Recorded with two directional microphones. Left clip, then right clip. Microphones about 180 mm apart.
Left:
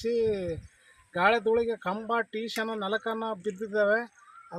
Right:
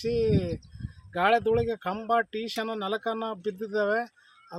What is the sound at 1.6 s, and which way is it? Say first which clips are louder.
Speech: even; 30° right (ahead or behind).